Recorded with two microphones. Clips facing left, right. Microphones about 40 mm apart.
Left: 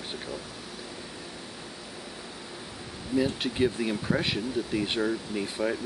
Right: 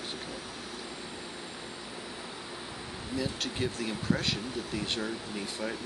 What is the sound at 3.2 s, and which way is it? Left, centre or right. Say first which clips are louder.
Speech: left 7 dB; centre.